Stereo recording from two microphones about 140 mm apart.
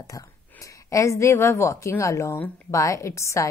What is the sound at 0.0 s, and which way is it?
A woman's voice, 25° left (ahead or behind).